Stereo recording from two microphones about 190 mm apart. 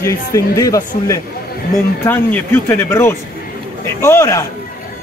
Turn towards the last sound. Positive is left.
turn(degrees=15)  # may be behind; listen again after turning